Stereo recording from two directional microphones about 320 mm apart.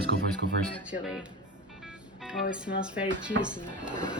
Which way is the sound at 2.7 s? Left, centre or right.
Left.